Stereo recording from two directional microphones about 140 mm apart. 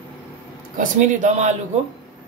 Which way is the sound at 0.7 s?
65° right (ahead or behind).